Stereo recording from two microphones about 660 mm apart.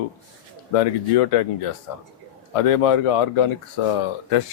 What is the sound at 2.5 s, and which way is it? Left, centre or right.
Speech, left.